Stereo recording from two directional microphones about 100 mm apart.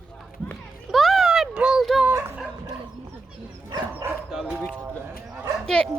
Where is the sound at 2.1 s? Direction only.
25° right (ahead or behind).